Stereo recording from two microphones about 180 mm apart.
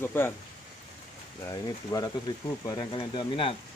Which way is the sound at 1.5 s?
20° left (ahead or behind).